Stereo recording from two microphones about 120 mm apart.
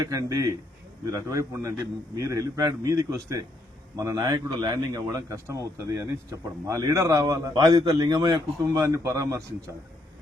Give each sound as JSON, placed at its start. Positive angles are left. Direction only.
{"t": 0.0, "sound": "a man's voice", "side_deg": -25}